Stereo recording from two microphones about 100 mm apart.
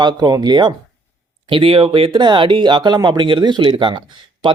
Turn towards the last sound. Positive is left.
turn(degrees=-55)  # may be behind; listen again after turning